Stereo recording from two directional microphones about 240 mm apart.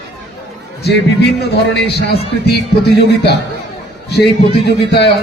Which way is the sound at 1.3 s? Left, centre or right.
Left.